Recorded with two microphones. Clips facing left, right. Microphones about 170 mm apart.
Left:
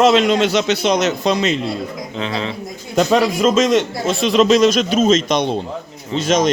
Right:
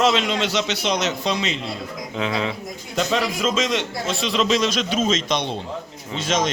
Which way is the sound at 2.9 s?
50° left (ahead or behind).